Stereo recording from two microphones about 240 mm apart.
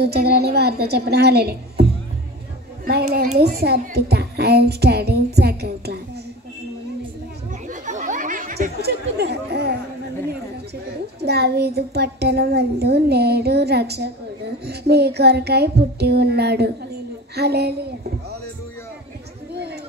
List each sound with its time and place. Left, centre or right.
0.0 s a child's voice: right
3.5 s a child's voice: right
7.6 s chatter: right
11.1 s a child's voice: right
19.5 s a sound: right